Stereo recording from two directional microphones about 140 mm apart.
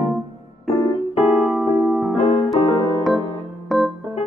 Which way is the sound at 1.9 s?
Centre (ahead or behind).